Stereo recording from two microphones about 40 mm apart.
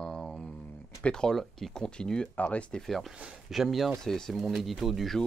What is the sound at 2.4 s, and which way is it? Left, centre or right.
Speech, left.